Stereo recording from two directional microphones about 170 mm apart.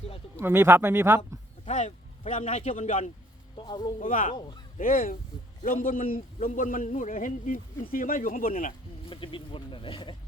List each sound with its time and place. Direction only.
0.3 s speech: 15° right (ahead or behind)
1.6 s a man's voice: 45° left (ahead or behind)
3.6 s speech: 25° left (ahead or behind)
4.0 s a man's voice: 50° left (ahead or behind)
4.3 s speech: 25° left (ahead or behind)
4.8 s a man's voice: 55° left (ahead or behind)
9.0 s speech: 30° left (ahead or behind)